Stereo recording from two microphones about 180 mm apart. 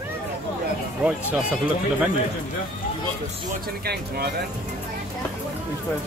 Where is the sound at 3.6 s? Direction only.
60° right (ahead or behind).